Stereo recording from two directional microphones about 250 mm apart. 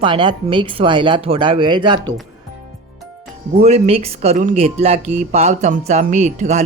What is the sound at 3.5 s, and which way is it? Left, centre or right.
Speech, right.